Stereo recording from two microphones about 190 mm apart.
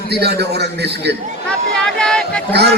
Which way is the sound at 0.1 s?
60° right (ahead or behind).